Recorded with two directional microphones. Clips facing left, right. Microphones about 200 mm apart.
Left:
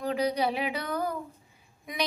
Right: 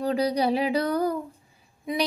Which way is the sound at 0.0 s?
35° right (ahead or behind).